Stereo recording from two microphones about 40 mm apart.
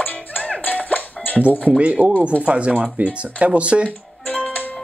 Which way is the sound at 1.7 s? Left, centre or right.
Right.